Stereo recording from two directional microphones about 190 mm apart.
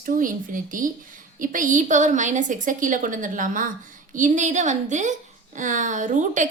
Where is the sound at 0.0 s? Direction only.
45° right (ahead or behind).